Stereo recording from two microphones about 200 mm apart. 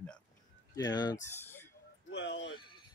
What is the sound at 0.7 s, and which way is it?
Fowl, 20° left (ahead or behind).